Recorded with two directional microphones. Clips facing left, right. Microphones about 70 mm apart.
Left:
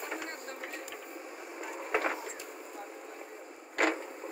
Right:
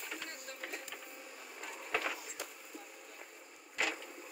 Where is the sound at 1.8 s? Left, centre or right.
Left.